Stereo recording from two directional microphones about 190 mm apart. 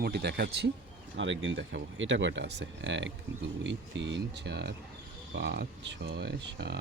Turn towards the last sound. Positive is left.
turn(degrees=-60)  # may be behind; listen again after turning